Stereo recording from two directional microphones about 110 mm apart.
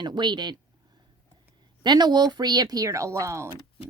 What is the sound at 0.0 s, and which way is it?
Speech, 45° right (ahead or behind).